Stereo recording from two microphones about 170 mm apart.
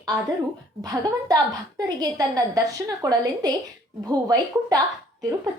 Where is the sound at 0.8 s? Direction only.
20° right (ahead or behind).